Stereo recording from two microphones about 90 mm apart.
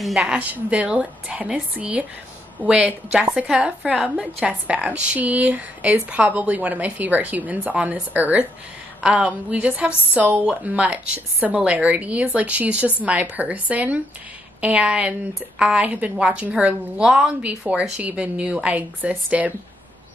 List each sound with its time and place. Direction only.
0.0 s a woman's voice: 5° right (ahead or behind)
0.4 s a woman's voice: 15° right (ahead or behind)